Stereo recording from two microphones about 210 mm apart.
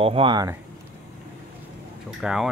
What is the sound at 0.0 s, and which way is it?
Speech, 25° right (ahead or behind).